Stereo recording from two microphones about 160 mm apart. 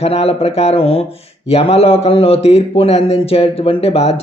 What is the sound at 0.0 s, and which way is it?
A man's voice, 40° left (ahead or behind).